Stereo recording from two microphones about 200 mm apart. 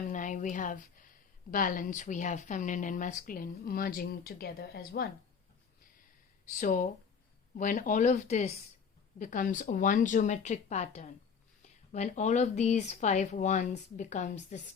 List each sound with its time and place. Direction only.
0.0 s a woman's voice: 40° left (ahead or behind)
6.5 s speech: 40° left (ahead or behind)